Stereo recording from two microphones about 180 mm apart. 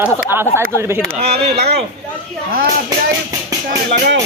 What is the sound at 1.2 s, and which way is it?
Speech, 35° right (ahead or behind).